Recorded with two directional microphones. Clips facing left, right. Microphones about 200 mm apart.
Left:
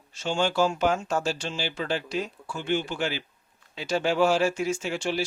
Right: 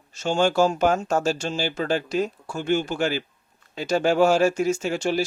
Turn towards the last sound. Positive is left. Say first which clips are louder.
# right 5 dB
turn(degrees=-45)  # may be behind; listen again after turning